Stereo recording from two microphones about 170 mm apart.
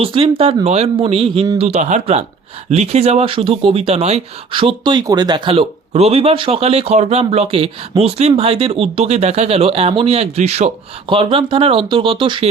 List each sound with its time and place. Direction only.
0.0 s speech: 35° right (ahead or behind)
11.1 s speech: 30° right (ahead or behind)